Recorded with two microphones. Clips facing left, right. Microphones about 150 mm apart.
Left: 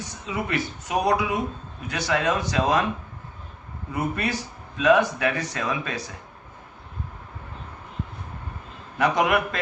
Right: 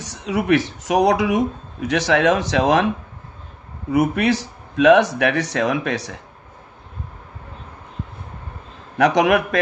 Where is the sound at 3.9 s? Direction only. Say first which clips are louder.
Right 9 dB; 90° right.